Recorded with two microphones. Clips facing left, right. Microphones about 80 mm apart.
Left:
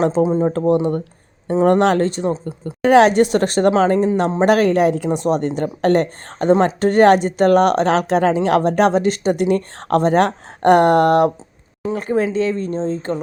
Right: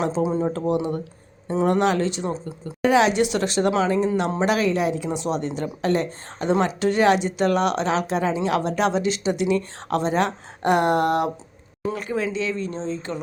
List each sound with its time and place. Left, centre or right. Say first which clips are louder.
0.2 s speech: left 6 dB; left
6.5 s speech: left 6 dB; left
8.4 s speech: left 7 dB; left
11.9 s speech: left 9 dB; left